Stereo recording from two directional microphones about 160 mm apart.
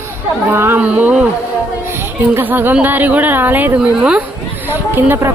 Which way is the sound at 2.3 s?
10° right (ahead or behind).